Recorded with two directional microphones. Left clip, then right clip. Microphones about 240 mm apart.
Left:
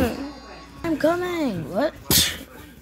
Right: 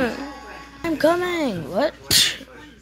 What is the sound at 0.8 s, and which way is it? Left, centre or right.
Speech, centre.